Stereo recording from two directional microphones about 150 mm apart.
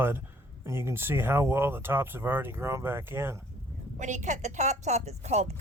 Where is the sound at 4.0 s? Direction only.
55° right (ahead or behind).